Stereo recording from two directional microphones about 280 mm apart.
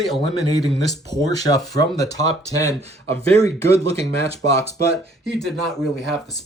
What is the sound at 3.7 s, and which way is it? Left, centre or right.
Speech, right.